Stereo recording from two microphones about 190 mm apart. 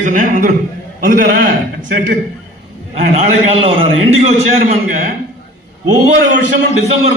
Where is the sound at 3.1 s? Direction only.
30° right (ahead or behind).